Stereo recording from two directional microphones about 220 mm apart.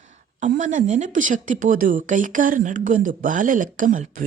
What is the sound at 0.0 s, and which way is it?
Speech, 35° right (ahead or behind).